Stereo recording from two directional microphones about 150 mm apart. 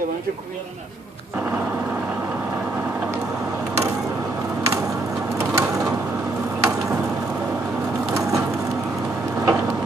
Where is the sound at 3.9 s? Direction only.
20° right (ahead or behind).